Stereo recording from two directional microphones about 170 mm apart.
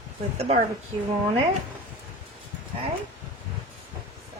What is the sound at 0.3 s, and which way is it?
Speech, 35° right (ahead or behind).